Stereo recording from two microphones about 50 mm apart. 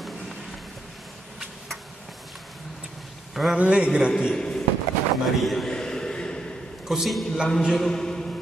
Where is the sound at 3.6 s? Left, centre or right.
Centre.